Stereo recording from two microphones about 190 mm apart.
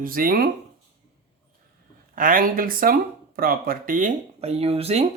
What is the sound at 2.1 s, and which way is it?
Speech, 50° right (ahead or behind).